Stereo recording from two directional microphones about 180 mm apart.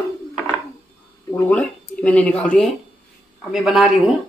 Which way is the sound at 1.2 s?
15° left (ahead or behind).